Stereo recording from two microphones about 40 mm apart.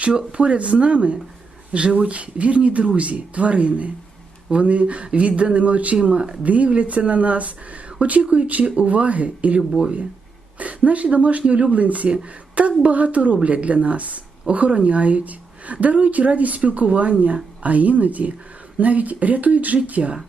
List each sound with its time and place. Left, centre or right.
0.3 s a woman's voice: right
9.6 s speech: right
10.6 s a woman's voice: right